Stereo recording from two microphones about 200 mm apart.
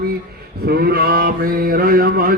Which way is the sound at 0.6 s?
50° right (ahead or behind).